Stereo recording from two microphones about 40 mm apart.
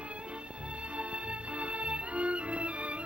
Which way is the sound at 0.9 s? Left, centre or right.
Right.